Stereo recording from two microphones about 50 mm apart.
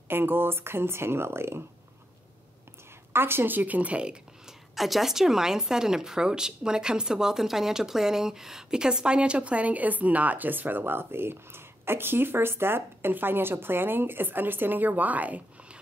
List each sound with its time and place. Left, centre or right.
0.1 s speech: right
3.1 s speech: right; by 4.6 s centre
4.7 s a woman's voice: centre; by 15.8 s right